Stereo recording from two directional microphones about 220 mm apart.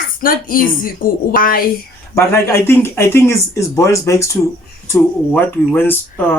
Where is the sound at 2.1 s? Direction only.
10° left (ahead or behind).